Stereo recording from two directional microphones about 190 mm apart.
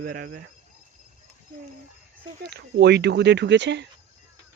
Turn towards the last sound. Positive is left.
turn(degrees=-65)  # may be behind; listen again after turning